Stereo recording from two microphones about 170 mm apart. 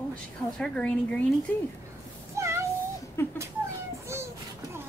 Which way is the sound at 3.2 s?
15° left (ahead or behind).